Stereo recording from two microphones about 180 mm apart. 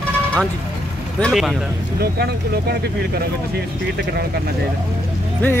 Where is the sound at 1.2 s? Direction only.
Centre (ahead or behind).